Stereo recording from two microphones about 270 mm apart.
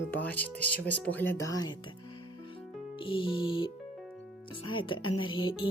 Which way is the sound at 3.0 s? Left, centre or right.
Centre.